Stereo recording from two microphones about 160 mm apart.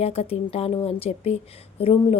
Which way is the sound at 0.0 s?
40° left (ahead or behind).